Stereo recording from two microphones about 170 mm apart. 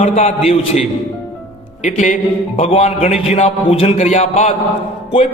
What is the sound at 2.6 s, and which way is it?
A man's voice, 35° left (ahead or behind).